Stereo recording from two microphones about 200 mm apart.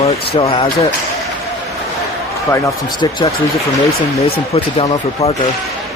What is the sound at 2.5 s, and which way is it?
Speech, 15° left (ahead or behind).